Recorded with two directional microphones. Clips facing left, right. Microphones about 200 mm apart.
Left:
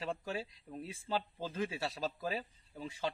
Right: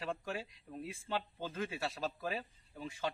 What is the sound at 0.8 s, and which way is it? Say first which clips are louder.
Speech: left 2 dB; 30° left (ahead or behind).